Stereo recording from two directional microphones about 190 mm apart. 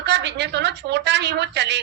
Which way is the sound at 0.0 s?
65° right (ahead or behind).